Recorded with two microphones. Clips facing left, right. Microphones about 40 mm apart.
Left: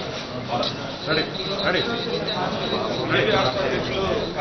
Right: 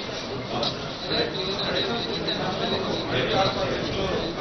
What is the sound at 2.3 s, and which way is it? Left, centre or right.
Speech, left.